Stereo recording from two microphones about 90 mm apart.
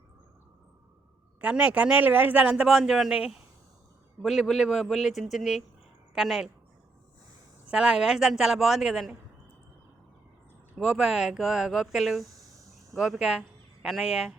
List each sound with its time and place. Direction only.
1.4 s a woman's voice: 15° right (ahead or behind)
2.6 s speech: 5° right (ahead or behind)
7.7 s a woman's voice: 10° right (ahead or behind)
10.8 s speech: 5° right (ahead or behind)